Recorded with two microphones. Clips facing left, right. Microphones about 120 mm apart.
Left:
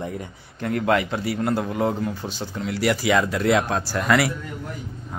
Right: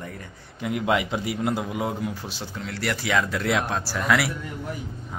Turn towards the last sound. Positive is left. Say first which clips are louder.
# left 3 dB
turn(degrees=0)  # may be behind; listen again after turning